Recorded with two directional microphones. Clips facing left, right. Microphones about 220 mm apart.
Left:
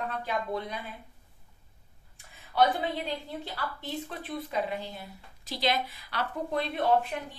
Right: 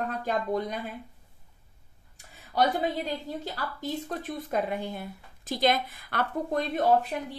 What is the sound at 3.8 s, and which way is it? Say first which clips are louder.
Speech: right 4 dB; 45° right (ahead or behind).